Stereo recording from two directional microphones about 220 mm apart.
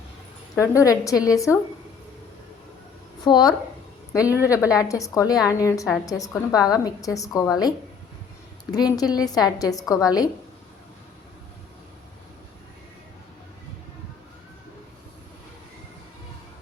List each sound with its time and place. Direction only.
0.5 s a woman's voice: 15° left (ahead or behind)
3.2 s a woman's voice: 20° left (ahead or behind)
8.7 s a woman's voice: 15° left (ahead or behind)